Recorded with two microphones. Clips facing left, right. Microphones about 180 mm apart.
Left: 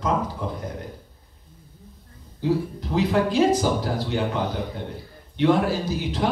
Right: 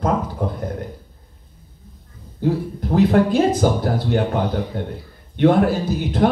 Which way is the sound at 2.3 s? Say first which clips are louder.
Right 2 dB; 50° right (ahead or behind).